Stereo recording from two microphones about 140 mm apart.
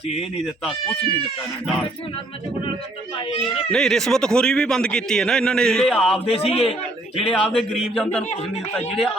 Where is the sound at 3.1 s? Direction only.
40° left (ahead or behind).